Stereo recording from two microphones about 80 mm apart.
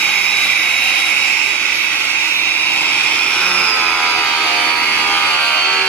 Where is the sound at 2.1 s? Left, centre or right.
Left.